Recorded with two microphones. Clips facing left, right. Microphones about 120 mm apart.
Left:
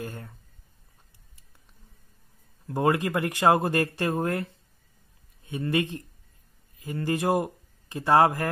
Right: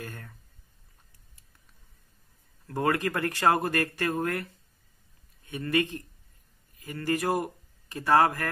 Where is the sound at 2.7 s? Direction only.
20° left (ahead or behind).